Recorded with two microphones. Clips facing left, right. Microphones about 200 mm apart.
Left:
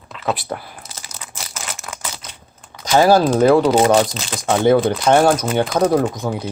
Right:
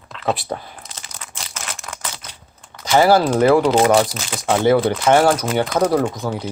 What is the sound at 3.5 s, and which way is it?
Speech, 10° left (ahead or behind).